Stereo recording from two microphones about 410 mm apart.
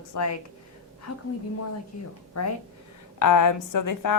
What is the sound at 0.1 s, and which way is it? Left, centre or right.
Speech, left.